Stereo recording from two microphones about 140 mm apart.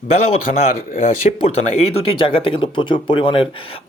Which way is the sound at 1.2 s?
50° left (ahead or behind).